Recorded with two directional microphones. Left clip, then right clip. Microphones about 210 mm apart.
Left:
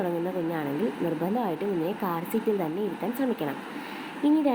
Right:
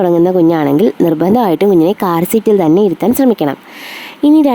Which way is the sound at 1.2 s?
50° right (ahead or behind).